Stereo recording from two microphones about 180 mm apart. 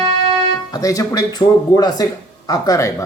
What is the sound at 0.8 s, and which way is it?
Speech, 20° left (ahead or behind).